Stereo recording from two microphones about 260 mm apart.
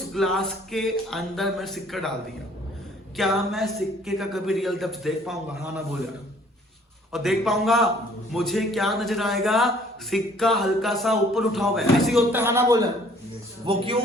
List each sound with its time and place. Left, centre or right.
0.1 s a man's voice: centre
3.2 s a man's voice: centre
7.1 s a man's voice: centre; by 14.0 s right